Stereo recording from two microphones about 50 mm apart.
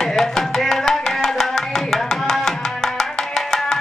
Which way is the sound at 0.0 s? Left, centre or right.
Centre.